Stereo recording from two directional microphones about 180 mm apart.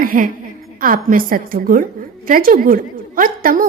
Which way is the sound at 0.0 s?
50° right (ahead or behind).